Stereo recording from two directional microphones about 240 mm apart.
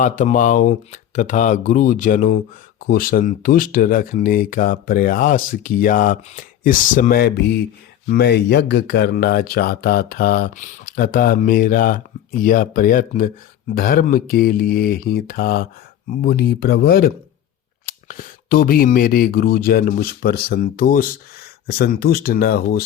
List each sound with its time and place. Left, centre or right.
0.0 s speech: left